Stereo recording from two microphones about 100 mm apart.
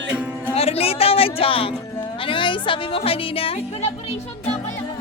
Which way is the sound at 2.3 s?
55° left (ahead or behind).